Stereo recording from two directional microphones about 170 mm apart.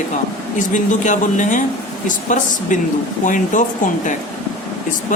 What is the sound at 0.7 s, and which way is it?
Speech, 45° left (ahead or behind).